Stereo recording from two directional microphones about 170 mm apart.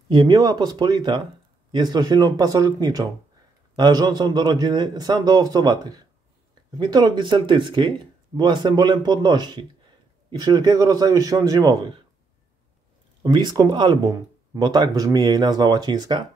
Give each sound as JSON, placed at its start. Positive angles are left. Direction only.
{"t": 0.1, "sound": "speech", "side_deg": -25}
{"t": 13.2, "sound": "speech", "side_deg": -25}